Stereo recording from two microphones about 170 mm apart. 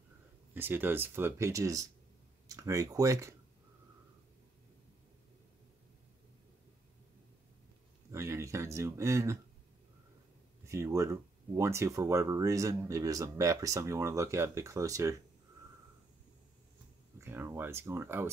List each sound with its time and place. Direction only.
0.6 s speech: 10° right (ahead or behind)
8.1 s a sound: 15° right (ahead or behind)
10.6 s speech: 15° right (ahead or behind)
17.2 s speech: 15° right (ahead or behind)